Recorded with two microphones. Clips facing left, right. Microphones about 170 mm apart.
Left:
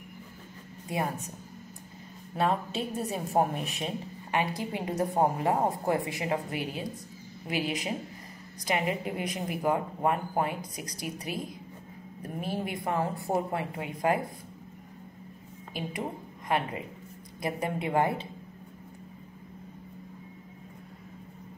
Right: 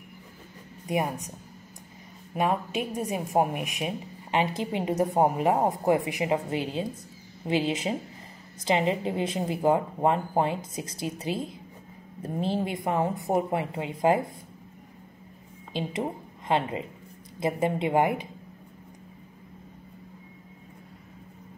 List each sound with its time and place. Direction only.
0.8 s a woman's voice: 20° right (ahead or behind)
2.3 s a woman's voice: 15° right (ahead or behind)
15.7 s a woman's voice: 25° right (ahead or behind)